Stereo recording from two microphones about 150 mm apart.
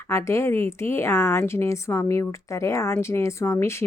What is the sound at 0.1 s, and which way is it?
A woman's voice, 20° left (ahead or behind).